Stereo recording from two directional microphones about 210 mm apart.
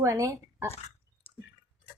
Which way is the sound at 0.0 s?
15° right (ahead or behind).